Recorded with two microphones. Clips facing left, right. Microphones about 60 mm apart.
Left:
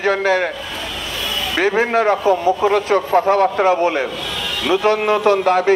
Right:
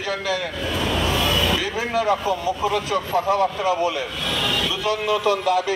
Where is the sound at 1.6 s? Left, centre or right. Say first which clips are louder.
Left 8 dB; left.